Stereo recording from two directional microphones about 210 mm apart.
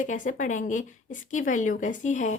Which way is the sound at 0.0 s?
40° left (ahead or behind).